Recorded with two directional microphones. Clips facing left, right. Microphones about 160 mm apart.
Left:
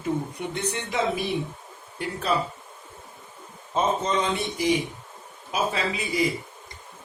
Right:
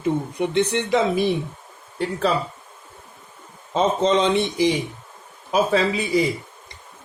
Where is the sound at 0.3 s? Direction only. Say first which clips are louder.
Right 9 dB; 90° right.